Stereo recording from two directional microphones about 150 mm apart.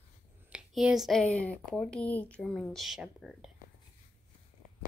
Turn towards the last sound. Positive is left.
turn(degrees=-5)  # may be behind; listen again after turning